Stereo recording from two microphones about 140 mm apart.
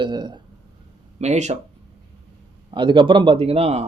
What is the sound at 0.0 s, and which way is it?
Speech, 30° right (ahead or behind).